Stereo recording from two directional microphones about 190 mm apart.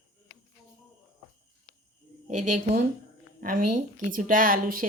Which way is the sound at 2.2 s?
40° right (ahead or behind).